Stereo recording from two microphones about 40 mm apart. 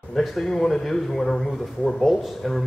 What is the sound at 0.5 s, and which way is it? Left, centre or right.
A man's voice, centre.